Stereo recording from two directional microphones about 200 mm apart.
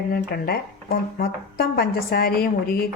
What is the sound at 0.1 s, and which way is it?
Speech, 50° left (ahead or behind).